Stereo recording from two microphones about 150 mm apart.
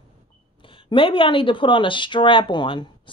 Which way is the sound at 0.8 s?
35° left (ahead or behind).